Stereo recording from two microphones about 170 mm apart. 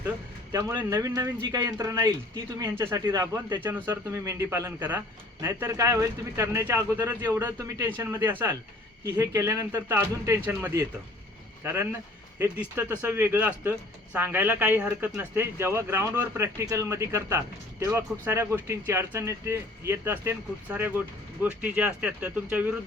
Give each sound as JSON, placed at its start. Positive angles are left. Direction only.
{"t": 0.5, "sound": "speech", "side_deg": -15}